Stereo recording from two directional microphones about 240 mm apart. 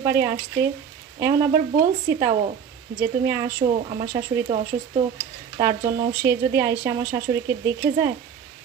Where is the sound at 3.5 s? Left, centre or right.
Right.